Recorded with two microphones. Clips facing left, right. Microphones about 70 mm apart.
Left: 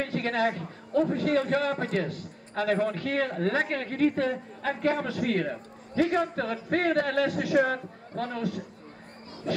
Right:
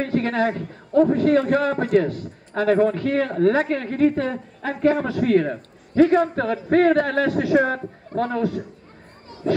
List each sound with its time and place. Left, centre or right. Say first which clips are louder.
0.0 s speech: right 6 dB; right